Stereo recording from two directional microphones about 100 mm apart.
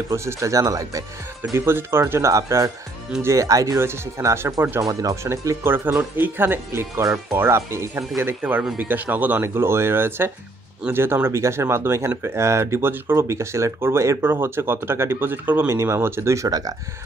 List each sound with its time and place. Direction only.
0.1 s speech: 25° right (ahead or behind)
8.4 s speech: 15° right (ahead or behind); by 16.7 s 40° right (ahead or behind)